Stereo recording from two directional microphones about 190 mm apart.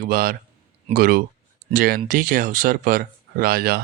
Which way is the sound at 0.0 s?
50° right (ahead or behind).